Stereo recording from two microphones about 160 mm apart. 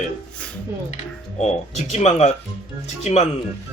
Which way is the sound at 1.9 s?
45° left (ahead or behind).